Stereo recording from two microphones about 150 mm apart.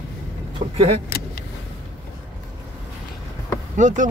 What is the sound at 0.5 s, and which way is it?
Speech, 40° right (ahead or behind).